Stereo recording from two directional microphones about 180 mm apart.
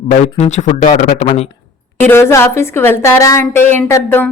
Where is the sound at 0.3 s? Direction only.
40° left (ahead or behind).